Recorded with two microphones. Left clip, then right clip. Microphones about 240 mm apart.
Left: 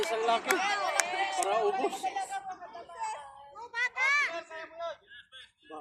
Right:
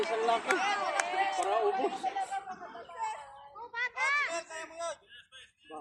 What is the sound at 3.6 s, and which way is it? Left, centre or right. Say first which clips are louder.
Children playing: left 3 dB; left.